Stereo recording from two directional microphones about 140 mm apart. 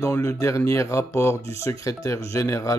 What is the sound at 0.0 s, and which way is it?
Speech, 20° left (ahead or behind).